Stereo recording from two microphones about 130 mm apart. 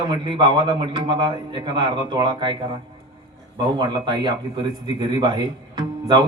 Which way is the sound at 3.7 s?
35° right (ahead or behind).